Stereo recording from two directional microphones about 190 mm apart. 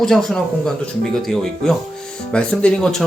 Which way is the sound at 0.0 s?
Centre (ahead or behind).